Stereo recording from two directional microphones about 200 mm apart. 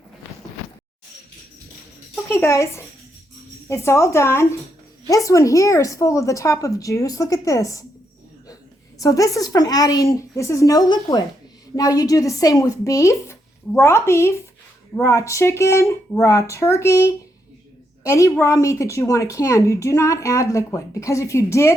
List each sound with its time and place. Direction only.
2.3 s a woman's voice: 15° left (ahead or behind)
9.0 s a woman's voice: 15° left (ahead or behind)